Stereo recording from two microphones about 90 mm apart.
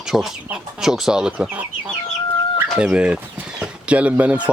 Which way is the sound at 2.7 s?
10° right (ahead or behind).